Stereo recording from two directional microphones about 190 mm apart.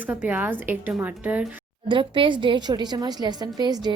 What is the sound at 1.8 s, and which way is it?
A woman's voice, 25° right (ahead or behind).